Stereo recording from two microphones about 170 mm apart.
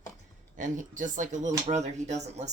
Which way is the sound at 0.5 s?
50° right (ahead or behind).